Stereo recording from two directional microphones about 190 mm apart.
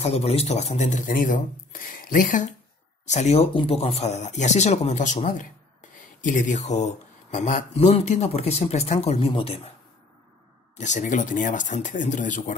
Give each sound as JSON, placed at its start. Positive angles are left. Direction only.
{"t": 0.0, "sound": "speech", "side_deg": 35}
{"t": 10.8, "sound": "speech", "side_deg": 40}